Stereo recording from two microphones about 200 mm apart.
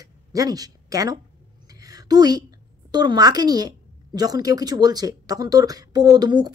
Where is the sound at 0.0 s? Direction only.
20° right (ahead or behind).